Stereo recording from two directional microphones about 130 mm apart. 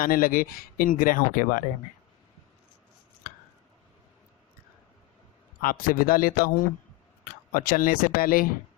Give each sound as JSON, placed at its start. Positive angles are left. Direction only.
{"t": 0.0, "sound": "speech", "side_deg": 90}
{"t": 5.6, "sound": "speech", "side_deg": 90}